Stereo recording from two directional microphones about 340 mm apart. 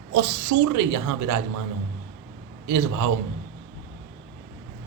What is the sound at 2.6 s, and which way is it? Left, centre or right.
Speech, right.